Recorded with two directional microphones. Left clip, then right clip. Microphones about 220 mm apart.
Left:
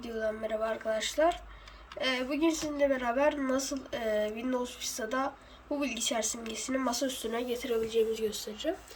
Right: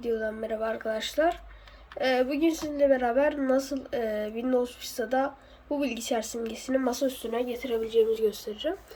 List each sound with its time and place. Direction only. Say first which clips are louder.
0.0 s speech: right 4 dB; centre (ahead or behind)
8.5 s speech: right 5 dB; 15° left (ahead or behind)